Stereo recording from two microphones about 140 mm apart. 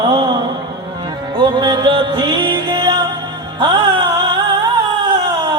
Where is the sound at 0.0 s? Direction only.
30° right (ahead or behind).